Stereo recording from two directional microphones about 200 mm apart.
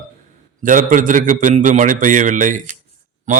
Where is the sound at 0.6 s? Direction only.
40° right (ahead or behind).